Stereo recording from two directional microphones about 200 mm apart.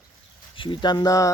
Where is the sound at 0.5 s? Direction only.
25° left (ahead or behind).